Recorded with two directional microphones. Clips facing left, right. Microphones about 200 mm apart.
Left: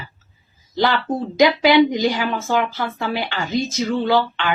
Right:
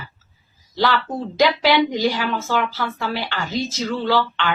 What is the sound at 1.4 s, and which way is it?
Speech, 15° left (ahead or behind).